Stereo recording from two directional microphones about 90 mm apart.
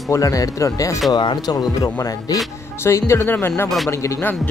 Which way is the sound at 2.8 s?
30° left (ahead or behind).